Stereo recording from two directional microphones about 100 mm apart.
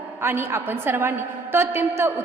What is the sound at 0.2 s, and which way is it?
A woman's voice, 25° right (ahead or behind).